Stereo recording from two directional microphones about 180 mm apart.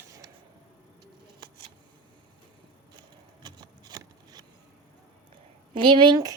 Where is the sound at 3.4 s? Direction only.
20° right (ahead or behind).